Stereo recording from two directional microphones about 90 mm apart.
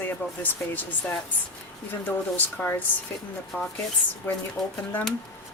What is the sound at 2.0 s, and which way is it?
Speech, 20° left (ahead or behind).